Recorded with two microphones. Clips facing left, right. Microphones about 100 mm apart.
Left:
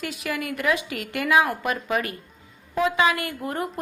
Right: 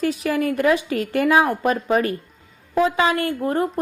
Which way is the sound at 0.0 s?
35° right (ahead or behind).